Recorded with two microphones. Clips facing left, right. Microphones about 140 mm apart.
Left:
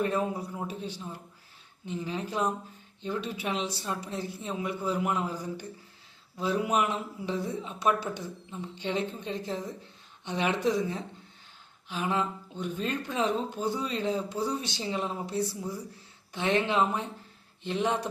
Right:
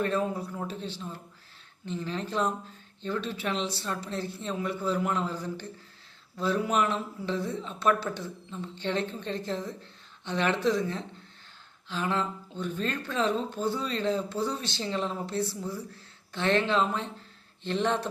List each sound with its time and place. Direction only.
0.0 s a woman's voice: 15° left (ahead or behind)